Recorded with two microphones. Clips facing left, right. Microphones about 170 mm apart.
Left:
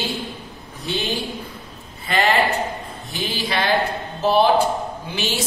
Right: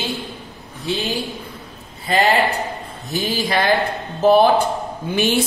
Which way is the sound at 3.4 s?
50° right (ahead or behind).